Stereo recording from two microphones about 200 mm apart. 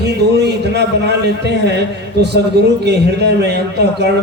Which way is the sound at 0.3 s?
55° right (ahead or behind).